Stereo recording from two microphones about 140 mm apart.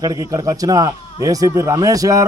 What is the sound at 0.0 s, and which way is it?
A man's voice, 25° right (ahead or behind).